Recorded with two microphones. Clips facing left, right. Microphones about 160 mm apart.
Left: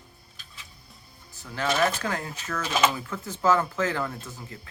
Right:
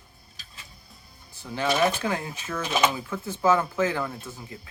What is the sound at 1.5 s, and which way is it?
Speech, 15° right (ahead or behind).